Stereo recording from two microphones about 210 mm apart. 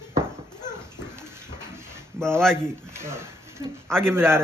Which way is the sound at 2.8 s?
10° right (ahead or behind).